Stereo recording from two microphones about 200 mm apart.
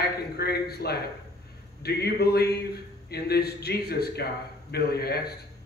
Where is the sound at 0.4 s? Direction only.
50° left (ahead or behind).